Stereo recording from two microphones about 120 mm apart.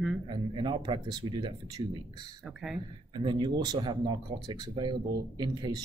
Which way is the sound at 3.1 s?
40° right (ahead or behind).